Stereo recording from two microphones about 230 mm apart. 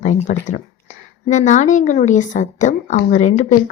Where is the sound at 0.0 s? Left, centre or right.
Left.